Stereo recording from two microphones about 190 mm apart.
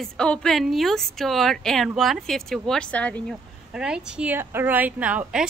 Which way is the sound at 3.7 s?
5° right (ahead or behind).